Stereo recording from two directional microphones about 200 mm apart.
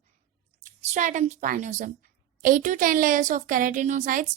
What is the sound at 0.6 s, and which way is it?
A woman's voice, 35° right (ahead or behind).